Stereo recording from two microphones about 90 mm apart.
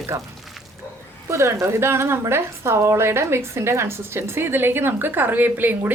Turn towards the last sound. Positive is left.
turn(degrees=-20)  # may be behind; listen again after turning